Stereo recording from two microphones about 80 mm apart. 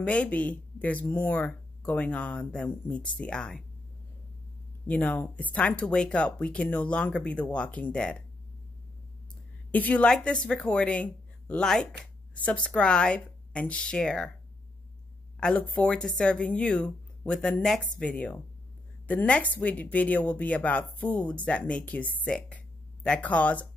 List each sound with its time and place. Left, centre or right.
0.0 s speech: centre
4.8 s speech: centre
9.7 s speech: centre
15.4 s speech: centre